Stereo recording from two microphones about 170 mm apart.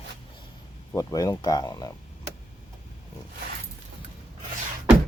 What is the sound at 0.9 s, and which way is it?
Speech, 20° left (ahead or behind).